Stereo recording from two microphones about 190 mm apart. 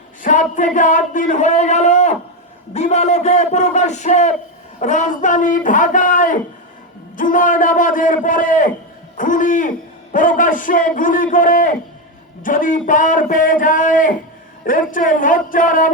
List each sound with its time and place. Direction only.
0.2 s a man's voice: 40° left (ahead or behind)